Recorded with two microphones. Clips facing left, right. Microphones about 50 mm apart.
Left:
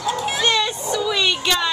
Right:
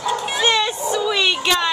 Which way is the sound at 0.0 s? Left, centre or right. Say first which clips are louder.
Right 1 dB; centre.